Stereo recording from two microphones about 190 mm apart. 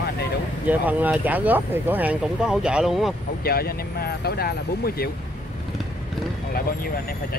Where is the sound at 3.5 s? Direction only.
55° left (ahead or behind).